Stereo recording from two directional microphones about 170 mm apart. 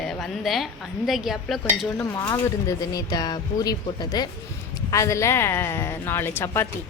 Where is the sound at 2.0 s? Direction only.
20° left (ahead or behind).